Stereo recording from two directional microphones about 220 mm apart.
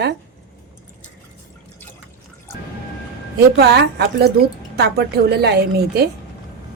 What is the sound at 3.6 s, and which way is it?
A woman's voice, 50° right (ahead or behind).